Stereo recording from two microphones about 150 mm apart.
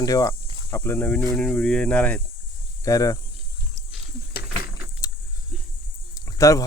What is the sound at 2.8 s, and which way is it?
Speech, 20° left (ahead or behind).